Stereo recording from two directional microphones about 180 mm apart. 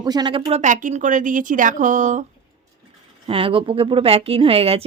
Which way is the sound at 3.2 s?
30° right (ahead or behind).